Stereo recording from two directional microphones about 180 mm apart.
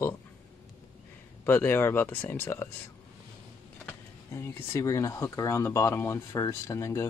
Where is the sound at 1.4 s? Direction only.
10° left (ahead or behind).